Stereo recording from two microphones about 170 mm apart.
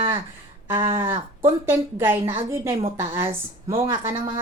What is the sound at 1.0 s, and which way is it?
Speech, 15° right (ahead or behind).